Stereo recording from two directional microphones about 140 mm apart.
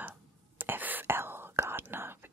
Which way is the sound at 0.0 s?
10° right (ahead or behind).